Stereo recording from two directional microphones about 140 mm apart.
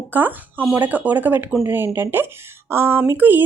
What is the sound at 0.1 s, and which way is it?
A woman's voice, 15° right (ahead or behind).